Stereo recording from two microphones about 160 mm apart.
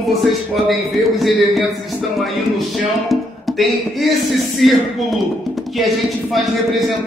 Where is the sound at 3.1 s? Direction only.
Centre (ahead or behind).